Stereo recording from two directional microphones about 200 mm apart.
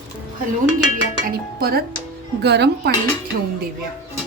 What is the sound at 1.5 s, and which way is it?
A woman's voice, 50° right (ahead or behind).